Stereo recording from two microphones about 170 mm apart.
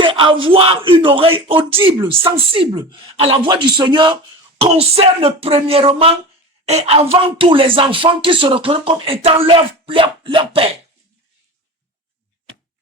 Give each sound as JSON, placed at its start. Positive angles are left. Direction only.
{"t": 0.0, "sound": "speech", "side_deg": -30}